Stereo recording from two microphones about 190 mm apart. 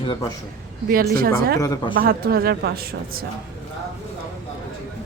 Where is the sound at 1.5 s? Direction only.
20° left (ahead or behind).